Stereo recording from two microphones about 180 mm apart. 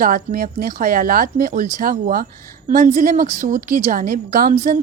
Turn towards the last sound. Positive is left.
turn(degrees=-50)  # may be behind; listen again after turning